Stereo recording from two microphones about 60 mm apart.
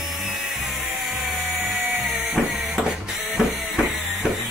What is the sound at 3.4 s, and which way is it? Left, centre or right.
Music, centre.